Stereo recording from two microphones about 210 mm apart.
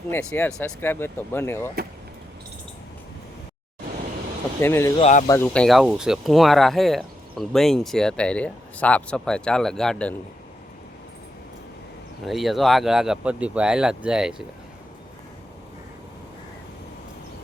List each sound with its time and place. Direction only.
0.1 s speech: 5° left (ahead or behind)
4.6 s speech: 10° left (ahead or behind)
4.9 s speech: 30° left (ahead or behind)
5.3 s speech: 5° left (ahead or behind)
12.2 s speech: centre (ahead or behind)